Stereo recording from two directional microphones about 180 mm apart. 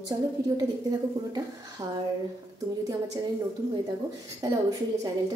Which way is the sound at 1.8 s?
20° right (ahead or behind).